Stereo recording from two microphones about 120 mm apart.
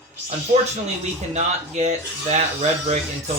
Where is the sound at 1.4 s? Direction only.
65° right (ahead or behind).